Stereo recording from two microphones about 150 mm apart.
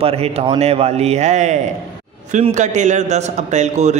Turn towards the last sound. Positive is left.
turn(degrees=-50)  # may be behind; listen again after turning